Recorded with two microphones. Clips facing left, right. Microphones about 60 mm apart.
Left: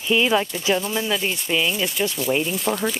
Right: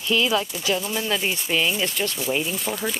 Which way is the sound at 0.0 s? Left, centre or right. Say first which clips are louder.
Left 3 dB; left.